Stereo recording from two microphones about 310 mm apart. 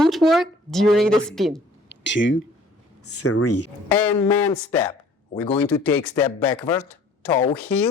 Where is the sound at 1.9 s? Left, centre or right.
Left.